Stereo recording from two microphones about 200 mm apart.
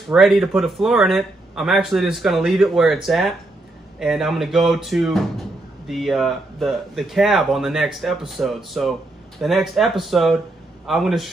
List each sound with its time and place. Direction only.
0.1 s speech: centre (ahead or behind)